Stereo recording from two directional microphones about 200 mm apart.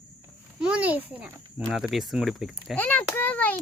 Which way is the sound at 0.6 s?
5° right (ahead or behind).